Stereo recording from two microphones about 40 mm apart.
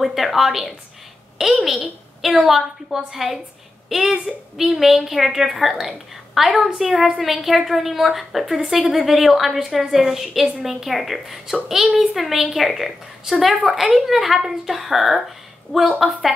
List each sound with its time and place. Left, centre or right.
0.0 s a woman's voice: centre